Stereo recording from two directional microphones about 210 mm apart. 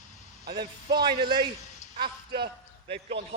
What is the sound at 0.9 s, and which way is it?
Speech, 20° right (ahead or behind).